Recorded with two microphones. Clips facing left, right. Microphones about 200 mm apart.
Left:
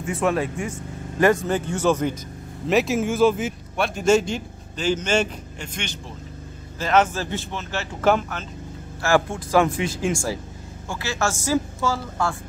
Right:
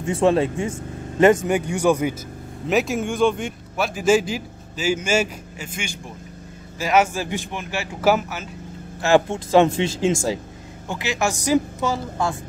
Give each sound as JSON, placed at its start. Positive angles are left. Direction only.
{"t": 0.0, "sound": "a woman's voice", "side_deg": -25}
{"t": 2.7, "sound": "a man's voice", "side_deg": 0}
{"t": 9.0, "sound": "a woman's voice", "side_deg": -20}